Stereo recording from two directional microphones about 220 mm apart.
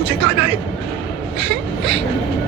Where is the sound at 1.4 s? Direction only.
45° right (ahead or behind).